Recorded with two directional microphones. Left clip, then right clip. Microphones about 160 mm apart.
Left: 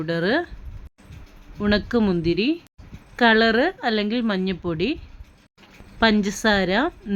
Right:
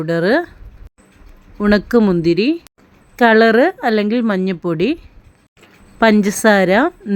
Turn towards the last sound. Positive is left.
turn(degrees=-25)  # may be behind; listen again after turning